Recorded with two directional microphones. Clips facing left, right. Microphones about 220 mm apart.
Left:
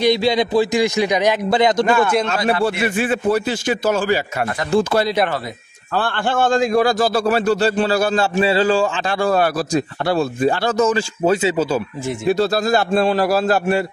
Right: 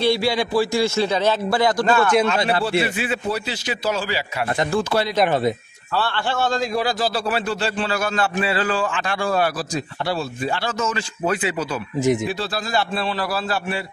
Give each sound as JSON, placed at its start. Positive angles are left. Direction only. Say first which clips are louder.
{"t": 0.0, "sound": "a man's voice", "louder": "left 4 dB", "side_deg": 20}
{"t": 2.2, "sound": "a man's voice", "louder": "left 2 dB", "side_deg": 45}
{"t": 5.9, "sound": "a man's voice", "louder": "left 4 dB", "side_deg": 50}
{"t": 9.2, "sound": "speech", "louder": "left 5 dB", "side_deg": 50}
{"t": 12.3, "sound": "a man's voice", "louder": "left 9 dB", "side_deg": 45}